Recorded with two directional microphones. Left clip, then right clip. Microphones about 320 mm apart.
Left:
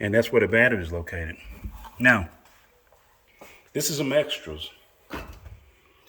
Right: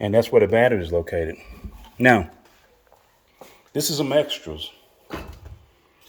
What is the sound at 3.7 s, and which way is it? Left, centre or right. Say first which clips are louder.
Speech: right 3 dB; right.